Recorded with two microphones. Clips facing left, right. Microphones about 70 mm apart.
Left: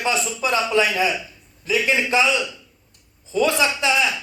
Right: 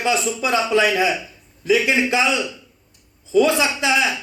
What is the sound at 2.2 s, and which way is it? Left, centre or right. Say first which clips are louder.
Speech: even; right.